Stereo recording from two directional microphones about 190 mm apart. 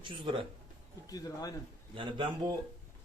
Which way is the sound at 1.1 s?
20° left (ahead or behind).